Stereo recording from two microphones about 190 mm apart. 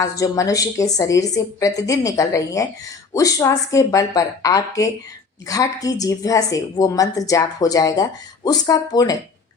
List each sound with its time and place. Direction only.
0.0 s a woman's voice: 15° left (ahead or behind)